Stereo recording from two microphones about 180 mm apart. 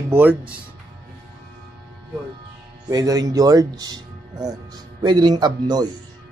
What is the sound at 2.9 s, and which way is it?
Speech, 20° right (ahead or behind).